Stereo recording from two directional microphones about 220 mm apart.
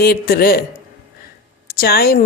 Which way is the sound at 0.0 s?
45° left (ahead or behind).